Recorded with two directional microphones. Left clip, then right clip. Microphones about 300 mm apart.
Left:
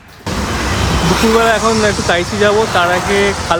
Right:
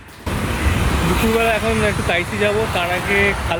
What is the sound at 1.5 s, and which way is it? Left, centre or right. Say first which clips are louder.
Speech: left 6 dB; centre.